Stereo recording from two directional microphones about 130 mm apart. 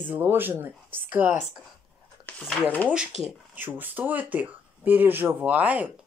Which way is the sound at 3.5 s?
15° right (ahead or behind).